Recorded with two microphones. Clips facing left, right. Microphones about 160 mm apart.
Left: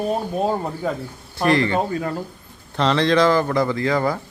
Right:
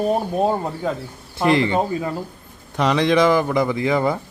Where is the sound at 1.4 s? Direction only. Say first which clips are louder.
Right 1 dB; 20° right (ahead or behind).